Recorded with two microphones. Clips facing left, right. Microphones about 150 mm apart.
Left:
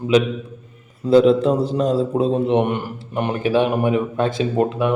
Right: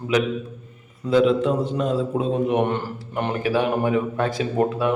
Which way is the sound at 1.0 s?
35° left (ahead or behind).